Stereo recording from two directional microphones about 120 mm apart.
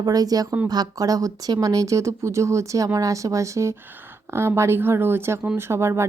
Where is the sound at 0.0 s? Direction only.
30° right (ahead or behind).